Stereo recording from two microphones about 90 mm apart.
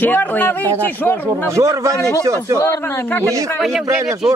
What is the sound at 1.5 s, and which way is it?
Speech, 35° right (ahead or behind).